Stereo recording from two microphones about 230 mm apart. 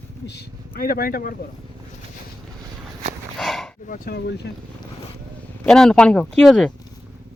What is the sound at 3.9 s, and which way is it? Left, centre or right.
Speech, left.